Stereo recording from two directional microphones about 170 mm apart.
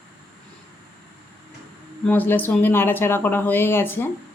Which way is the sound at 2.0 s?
10° left (ahead or behind).